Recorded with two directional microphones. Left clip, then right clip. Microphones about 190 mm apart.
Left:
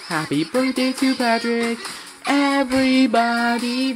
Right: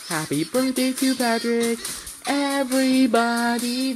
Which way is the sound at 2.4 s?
15° left (ahead or behind).